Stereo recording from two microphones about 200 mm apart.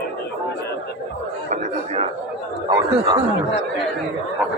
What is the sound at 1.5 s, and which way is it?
A man's voice, 30° right (ahead or behind).